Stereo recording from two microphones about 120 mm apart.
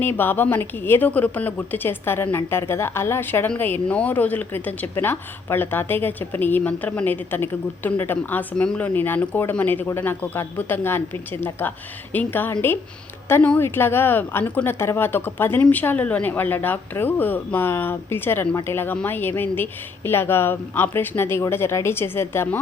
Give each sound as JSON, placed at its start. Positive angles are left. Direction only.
{"t": 0.0, "sound": "a woman's voice", "side_deg": 20}